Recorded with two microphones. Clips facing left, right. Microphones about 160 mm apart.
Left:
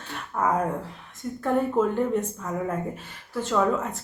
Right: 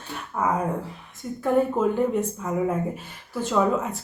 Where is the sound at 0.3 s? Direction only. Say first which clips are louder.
Even; 5° right (ahead or behind).